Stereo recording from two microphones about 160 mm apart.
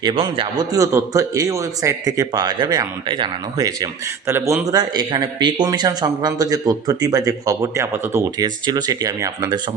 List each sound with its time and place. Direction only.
0.0 s a man's voice: 30° right (ahead or behind)